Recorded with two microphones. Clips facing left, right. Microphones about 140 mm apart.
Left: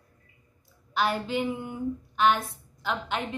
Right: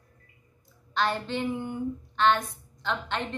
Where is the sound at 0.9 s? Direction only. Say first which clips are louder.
Left 1 dB; 10° left (ahead or behind).